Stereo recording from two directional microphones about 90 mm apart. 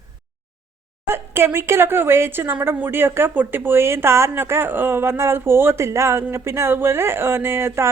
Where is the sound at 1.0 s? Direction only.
25° right (ahead or behind).